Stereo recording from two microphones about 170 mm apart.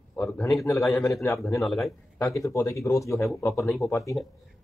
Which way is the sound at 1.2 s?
15° left (ahead or behind).